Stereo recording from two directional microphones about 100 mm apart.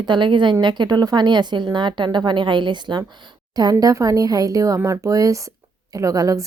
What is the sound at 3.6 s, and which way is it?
A woman's voice, 40° right (ahead or behind).